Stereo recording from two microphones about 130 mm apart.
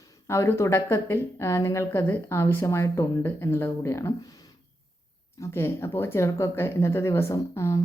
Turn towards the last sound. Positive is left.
turn(degrees=20)  # may be behind; listen again after turning